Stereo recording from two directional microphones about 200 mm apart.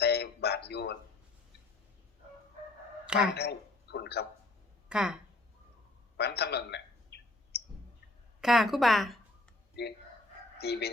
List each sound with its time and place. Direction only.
0.0 s a sound: 55° left (ahead or behind)
3.3 s a man's voice: 55° left (ahead or behind)
4.9 s a woman's voice: 5° right (ahead or behind)
6.1 s a sound: 55° left (ahead or behind)
8.4 s a woman's voice: centre (ahead or behind)
9.8 s speech: 55° left (ahead or behind)